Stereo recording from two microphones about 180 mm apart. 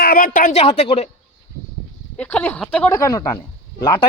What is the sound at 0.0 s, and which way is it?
Speech, 50° left (ahead or behind).